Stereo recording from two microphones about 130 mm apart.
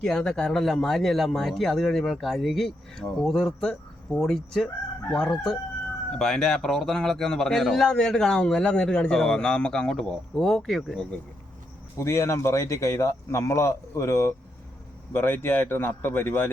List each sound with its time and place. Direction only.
0.0 s speech: 5° left (ahead or behind)
11.9 s speech: 20° left (ahead or behind)